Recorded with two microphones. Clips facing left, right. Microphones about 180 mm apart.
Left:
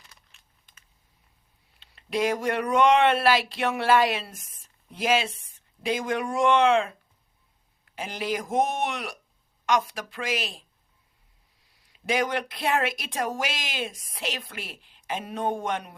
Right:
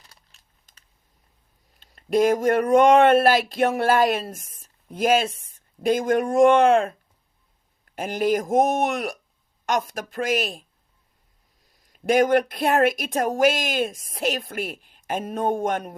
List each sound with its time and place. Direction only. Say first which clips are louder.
0.0 s a sound: right 1 dB; 40° right (ahead or behind)
1.8 s speech: right 7 dB; 45° right (ahead or behind)
7.9 s speech: right 8 dB; 50° right (ahead or behind)